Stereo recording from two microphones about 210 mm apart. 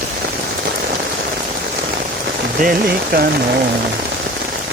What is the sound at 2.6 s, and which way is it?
Speech, 45° right (ahead or behind).